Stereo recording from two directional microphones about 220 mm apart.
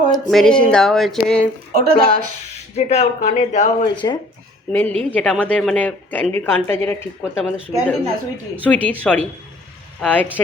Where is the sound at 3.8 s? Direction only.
20° left (ahead or behind).